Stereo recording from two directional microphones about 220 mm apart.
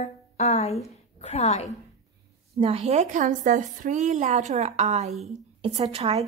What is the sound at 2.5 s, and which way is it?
A woman's voice, 25° right (ahead or behind).